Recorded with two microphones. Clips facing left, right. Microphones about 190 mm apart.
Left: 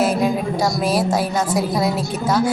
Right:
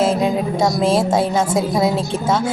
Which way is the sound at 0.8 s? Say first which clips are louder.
Right 4 dB; 25° right (ahead or behind).